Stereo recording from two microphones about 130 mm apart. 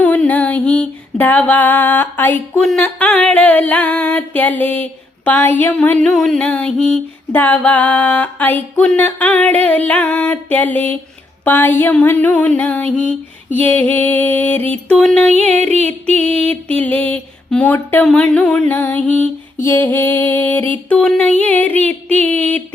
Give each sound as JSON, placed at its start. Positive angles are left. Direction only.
{"t": 0.0, "sound": "female singing", "side_deg": 10}
{"t": 16.2, "sound": "music", "side_deg": -50}
{"t": 16.5, "sound": "female singing", "side_deg": 10}